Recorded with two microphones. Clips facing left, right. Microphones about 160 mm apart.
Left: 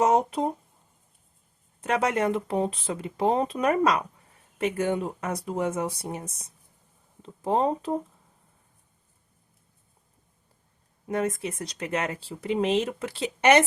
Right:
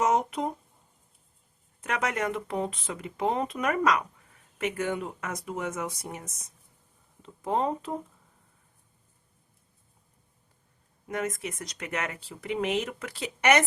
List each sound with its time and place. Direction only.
0.0 s a sound: 30° left (ahead or behind)
1.8 s speech: 30° left (ahead or behind)
11.1 s speech: 30° left (ahead or behind)